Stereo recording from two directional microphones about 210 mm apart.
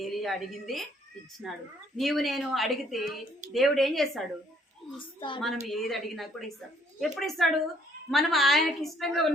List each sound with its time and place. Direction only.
0.0 s a woman's voice: centre (ahead or behind)
4.9 s speech: 25° left (ahead or behind)
5.4 s a woman's voice: centre (ahead or behind)